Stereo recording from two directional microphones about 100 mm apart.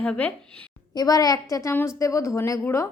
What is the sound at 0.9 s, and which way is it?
A woman's voice, 40° left (ahead or behind).